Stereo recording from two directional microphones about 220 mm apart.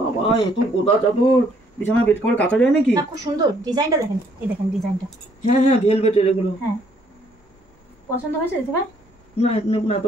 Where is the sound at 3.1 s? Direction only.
15° right (ahead or behind).